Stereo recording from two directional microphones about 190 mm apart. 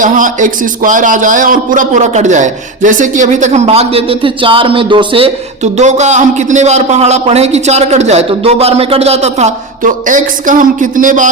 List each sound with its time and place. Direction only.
0.0 s a man's voice: 45° right (ahead or behind); by 5.3 s 25° right (ahead or behind)
5.7 s a man's voice: 35° right (ahead or behind)